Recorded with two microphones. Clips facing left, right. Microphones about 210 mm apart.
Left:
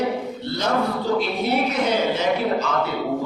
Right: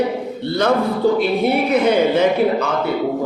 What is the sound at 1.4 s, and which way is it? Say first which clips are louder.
Speech: right 6 dB; 55° right (ahead or behind).